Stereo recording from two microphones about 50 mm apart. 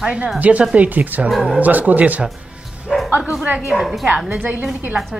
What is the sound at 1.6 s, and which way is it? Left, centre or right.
Speech, right.